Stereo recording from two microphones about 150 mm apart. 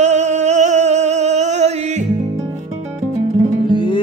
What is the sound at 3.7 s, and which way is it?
Music, 30° left (ahead or behind).